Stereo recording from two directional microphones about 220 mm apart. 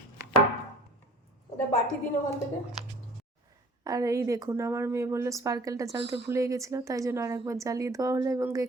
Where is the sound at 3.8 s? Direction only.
15° right (ahead or behind).